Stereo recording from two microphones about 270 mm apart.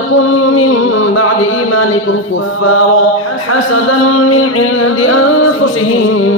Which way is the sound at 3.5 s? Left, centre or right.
Left.